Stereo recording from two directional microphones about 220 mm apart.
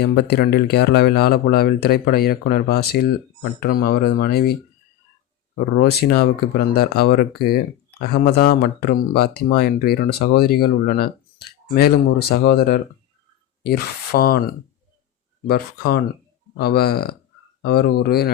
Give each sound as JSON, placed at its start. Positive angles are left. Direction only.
{"t": 0.0, "sound": "speech", "side_deg": 45}
{"t": 5.7, "sound": "speech", "side_deg": 50}
{"t": 15.4, "sound": "speech", "side_deg": 45}